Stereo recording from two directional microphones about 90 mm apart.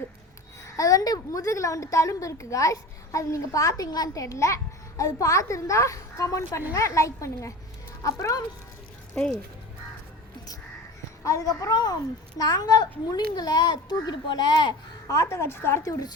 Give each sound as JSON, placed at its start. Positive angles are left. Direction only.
{"t": 0.8, "sound": "a woman's voice", "side_deg": 45}
{"t": 9.2, "sound": "speech", "side_deg": 10}
{"t": 11.2, "sound": "a child's voice", "side_deg": 40}
{"t": 15.0, "sound": "a woman's voice", "side_deg": 35}
{"t": 15.8, "sound": "a child's voice", "side_deg": 45}